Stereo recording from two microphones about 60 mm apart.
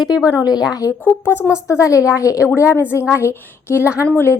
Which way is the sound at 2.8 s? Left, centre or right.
Right.